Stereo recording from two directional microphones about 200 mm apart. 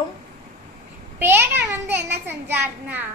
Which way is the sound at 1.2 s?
10° right (ahead or behind).